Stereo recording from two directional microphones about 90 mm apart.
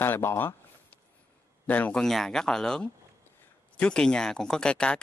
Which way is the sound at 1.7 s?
15° left (ahead or behind).